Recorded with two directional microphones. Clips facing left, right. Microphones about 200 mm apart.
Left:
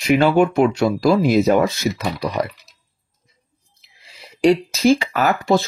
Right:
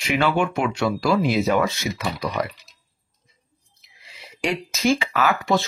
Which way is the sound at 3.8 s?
35° left (ahead or behind).